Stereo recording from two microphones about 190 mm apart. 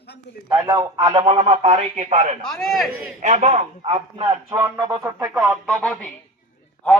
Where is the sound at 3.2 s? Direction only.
40° right (ahead or behind).